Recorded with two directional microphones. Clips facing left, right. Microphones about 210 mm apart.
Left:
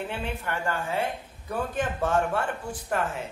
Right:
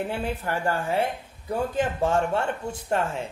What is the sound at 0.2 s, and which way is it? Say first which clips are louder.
Speech: right 4 dB; 35° right (ahead or behind).